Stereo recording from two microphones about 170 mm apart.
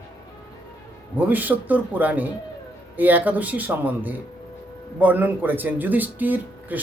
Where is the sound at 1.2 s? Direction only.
10° right (ahead or behind).